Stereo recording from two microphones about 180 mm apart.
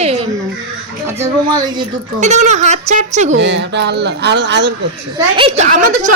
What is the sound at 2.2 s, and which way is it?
Speech, 40° right (ahead or behind).